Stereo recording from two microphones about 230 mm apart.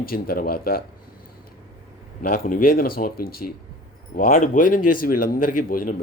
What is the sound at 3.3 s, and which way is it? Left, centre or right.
Speech, left.